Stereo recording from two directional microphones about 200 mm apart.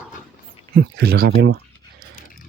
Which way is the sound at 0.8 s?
50° right (ahead or behind).